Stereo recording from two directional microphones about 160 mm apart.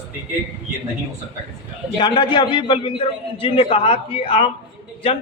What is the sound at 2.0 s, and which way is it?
A man's voice, 30° left (ahead or behind).